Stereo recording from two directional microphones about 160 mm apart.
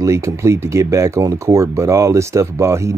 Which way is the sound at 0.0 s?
20° right (ahead or behind).